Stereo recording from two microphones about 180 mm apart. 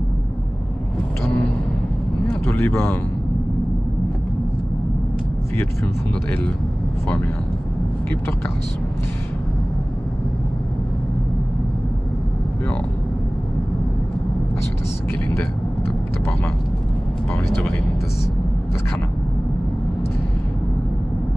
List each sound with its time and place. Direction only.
2.4 s speech: 15° left (ahead or behind)